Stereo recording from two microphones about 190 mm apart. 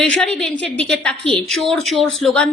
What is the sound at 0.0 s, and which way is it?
A woman's voice, 5° left (ahead or behind).